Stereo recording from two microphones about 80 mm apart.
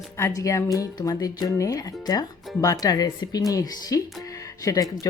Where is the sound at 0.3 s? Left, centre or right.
Left.